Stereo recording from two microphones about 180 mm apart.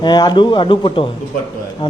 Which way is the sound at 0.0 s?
25° left (ahead or behind).